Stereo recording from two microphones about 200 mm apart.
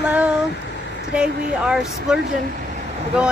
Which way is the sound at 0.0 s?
5° right (ahead or behind).